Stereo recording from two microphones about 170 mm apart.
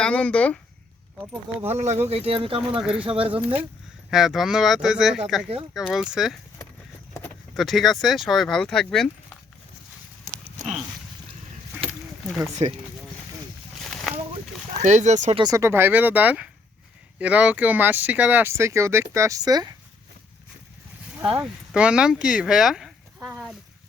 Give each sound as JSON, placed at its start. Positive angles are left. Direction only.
{"t": 0.0, "sound": "speech", "side_deg": 5}
{"t": 1.6, "sound": "speech", "side_deg": -40}
{"t": 2.8, "sound": "speech", "side_deg": -5}
{"t": 3.1, "sound": "speech", "side_deg": -35}
{"t": 3.3, "sound": "speech", "side_deg": -10}
{"t": 7.5, "sound": "speech", "side_deg": 0}
{"t": 12.5, "sound": "speech", "side_deg": -40}
{"t": 13.8, "sound": "a sound", "side_deg": 0}
{"t": 14.8, "sound": "speech", "side_deg": -40}
{"t": 15.4, "sound": "speech", "side_deg": -20}
{"t": 21.3, "sound": "speech", "side_deg": -5}